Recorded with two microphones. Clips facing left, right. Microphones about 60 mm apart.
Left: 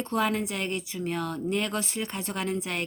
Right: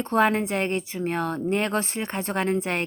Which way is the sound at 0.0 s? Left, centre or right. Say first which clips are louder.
Right 6 dB; right.